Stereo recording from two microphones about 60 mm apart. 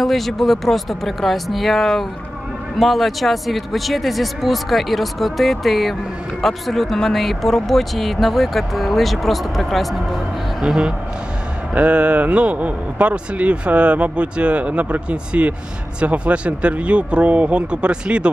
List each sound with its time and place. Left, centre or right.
0.0 s speech: centre
11.7 s a man's voice: right